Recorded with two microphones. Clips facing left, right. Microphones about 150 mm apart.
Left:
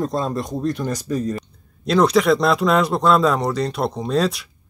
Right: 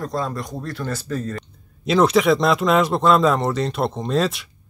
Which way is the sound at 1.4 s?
5° right (ahead or behind).